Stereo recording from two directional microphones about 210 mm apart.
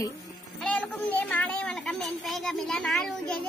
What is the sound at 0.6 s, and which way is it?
A child's voice, 5° left (ahead or behind).